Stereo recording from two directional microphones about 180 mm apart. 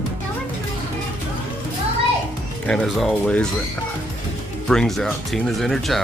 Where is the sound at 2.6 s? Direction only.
5° left (ahead or behind).